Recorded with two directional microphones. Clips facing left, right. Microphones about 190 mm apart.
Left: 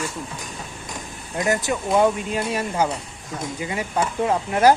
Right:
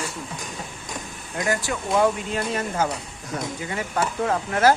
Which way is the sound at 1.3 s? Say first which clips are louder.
Left 3 dB; 20° left (ahead or behind).